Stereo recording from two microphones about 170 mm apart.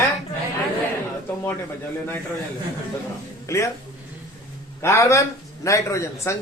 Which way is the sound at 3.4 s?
15° left (ahead or behind).